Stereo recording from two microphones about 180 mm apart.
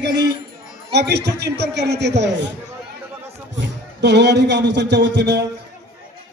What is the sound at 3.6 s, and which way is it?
A man's voice, 70° right (ahead or behind).